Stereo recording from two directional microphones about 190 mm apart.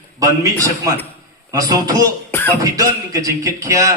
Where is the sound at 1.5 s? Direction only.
20° right (ahead or behind).